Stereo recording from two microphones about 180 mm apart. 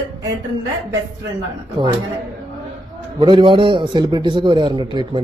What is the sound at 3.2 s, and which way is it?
A man's voice, 25° right (ahead or behind).